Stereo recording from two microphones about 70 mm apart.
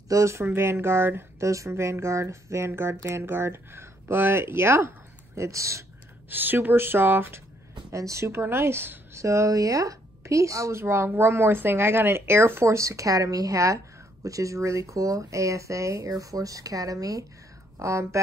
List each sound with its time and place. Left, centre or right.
0.1 s speech: right
6.3 s speech: right
7.9 s speech: right
9.1 s speech: right
17.7 s speech: right